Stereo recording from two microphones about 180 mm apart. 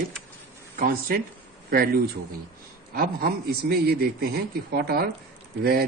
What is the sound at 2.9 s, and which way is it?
A man's voice, 55° right (ahead or behind).